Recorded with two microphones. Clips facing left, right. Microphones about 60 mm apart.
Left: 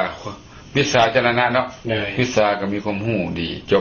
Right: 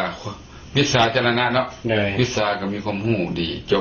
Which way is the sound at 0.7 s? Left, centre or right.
Left.